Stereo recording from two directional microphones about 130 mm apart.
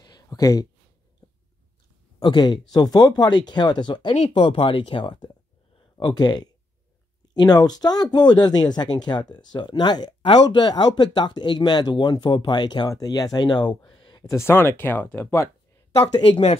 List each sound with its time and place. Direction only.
0.0 s a sound: 30° left (ahead or behind)
1.2 s biting: 30° left (ahead or behind)
2.1 s speech: 35° left (ahead or behind)
13.8 s a sound: 40° left (ahead or behind)
14.3 s speech: 20° left (ahead or behind)
16.0 s speech: 50° left (ahead or behind)